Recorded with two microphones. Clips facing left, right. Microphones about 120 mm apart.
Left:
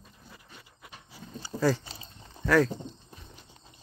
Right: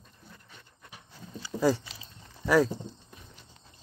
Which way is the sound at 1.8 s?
35° left (ahead or behind).